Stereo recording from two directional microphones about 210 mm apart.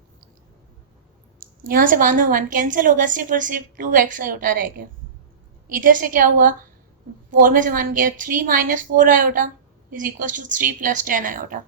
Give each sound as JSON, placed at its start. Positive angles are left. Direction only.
{"t": 1.6, "sound": "a woman's voice", "side_deg": -40}